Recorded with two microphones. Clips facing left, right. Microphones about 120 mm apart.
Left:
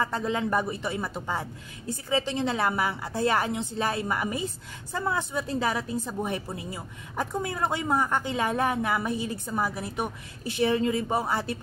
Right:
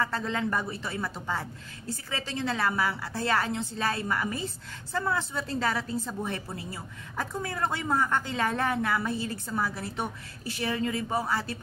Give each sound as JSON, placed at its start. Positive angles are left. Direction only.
{"t": 0.0, "sound": "a woman's voice", "side_deg": 15}